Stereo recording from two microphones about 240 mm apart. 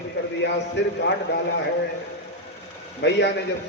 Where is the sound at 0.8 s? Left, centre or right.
Left.